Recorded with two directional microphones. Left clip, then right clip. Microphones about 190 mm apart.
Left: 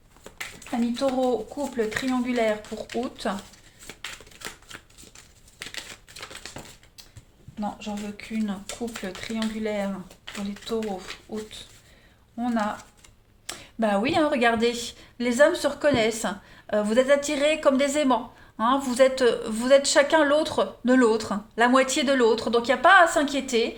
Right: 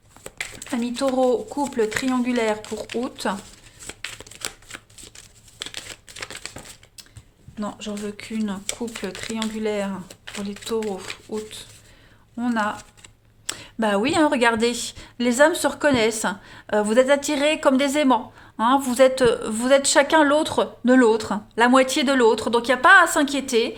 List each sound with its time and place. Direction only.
0.9 s speech: 45° right (ahead or behind)
7.6 s speech: 40° right (ahead or behind)